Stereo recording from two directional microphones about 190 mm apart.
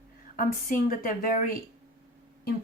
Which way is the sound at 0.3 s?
45° left (ahead or behind).